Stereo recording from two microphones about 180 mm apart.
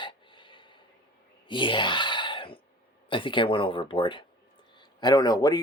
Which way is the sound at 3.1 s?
30° left (ahead or behind).